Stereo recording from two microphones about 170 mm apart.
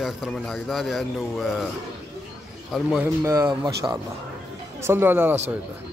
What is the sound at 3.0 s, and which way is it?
Speech, 20° right (ahead or behind).